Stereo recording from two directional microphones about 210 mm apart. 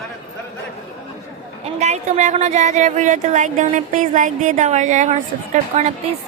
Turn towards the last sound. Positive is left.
turn(degrees=-35)  # may be behind; listen again after turning